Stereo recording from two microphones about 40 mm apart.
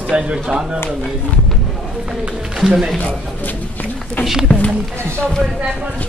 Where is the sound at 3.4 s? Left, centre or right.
Left.